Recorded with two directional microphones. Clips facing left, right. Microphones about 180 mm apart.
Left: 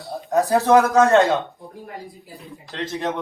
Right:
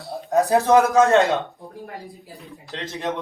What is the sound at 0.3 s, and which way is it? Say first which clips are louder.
Speech: even; 20° right (ahead or behind).